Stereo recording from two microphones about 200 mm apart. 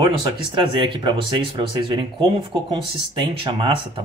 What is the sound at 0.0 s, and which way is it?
Speech, 25° right (ahead or behind).